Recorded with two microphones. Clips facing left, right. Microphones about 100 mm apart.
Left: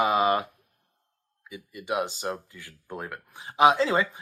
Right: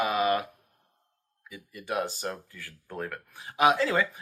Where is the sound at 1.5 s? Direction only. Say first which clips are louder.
Left 3 dB; 20° left (ahead or behind).